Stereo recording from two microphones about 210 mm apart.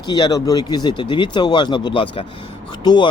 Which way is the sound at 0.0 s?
20° left (ahead or behind).